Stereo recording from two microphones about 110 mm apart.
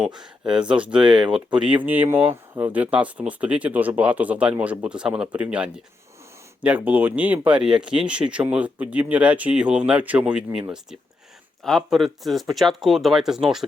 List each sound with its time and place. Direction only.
0.2 s speech: 5° right (ahead or behind)
1.0 s speech: 45° right (ahead or behind)
1.3 s speech: 10° right (ahead or behind)
11.6 s speech: centre (ahead or behind)